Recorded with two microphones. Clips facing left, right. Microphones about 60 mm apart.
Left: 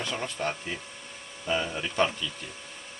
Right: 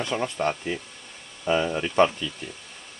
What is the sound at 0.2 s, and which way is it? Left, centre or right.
Speech, centre.